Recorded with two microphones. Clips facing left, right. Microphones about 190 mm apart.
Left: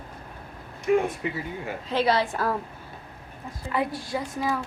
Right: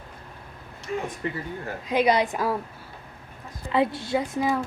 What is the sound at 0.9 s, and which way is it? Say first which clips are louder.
Speech: left 9 dB; 70° left (ahead or behind).